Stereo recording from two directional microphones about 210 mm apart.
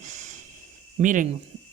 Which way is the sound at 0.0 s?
35° right (ahead or behind).